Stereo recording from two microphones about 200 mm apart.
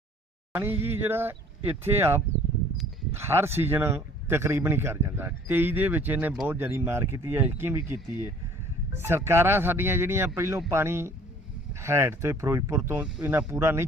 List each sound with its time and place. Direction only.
0.5 s a man's voice: 10° right (ahead or behind)
9.0 s a man's voice: 10° right (ahead or behind)